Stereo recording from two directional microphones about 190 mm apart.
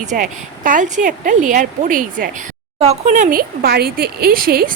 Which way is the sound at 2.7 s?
35° right (ahead or behind).